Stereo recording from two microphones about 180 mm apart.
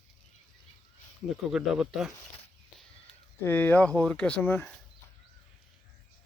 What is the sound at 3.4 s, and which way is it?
Speech, 10° left (ahead or behind).